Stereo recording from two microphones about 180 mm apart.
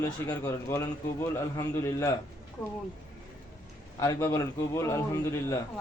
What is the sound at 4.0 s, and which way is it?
Speech, 15° left (ahead or behind).